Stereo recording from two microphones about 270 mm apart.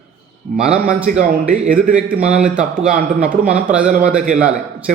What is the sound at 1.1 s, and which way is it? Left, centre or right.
Speech, right.